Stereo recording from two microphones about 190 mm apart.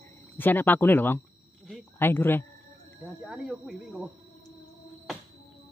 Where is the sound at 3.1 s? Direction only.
Centre (ahead or behind).